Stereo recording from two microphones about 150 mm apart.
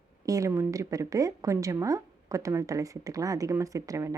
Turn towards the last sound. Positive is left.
turn(degrees=-20)  # may be behind; listen again after turning